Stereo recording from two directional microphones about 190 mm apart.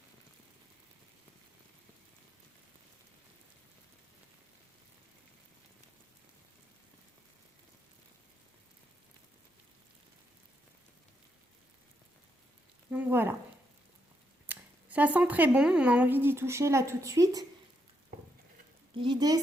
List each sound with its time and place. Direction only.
12.9 s speech: 10° right (ahead or behind)
14.4 s speech: 10° right (ahead or behind)
19.0 s a woman's voice: 20° right (ahead or behind)